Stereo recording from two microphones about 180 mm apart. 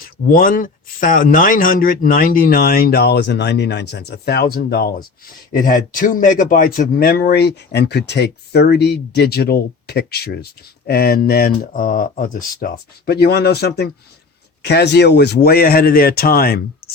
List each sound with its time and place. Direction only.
0.0 s speech: 50° left (ahead or behind)
5.5 s speech: 50° left (ahead or behind)